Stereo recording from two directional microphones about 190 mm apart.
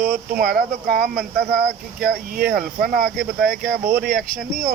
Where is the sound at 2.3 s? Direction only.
50° right (ahead or behind).